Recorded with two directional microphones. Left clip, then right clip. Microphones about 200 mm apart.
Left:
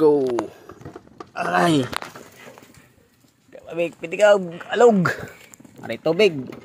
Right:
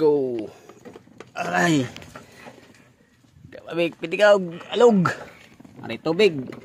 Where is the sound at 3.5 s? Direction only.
25° right (ahead or behind).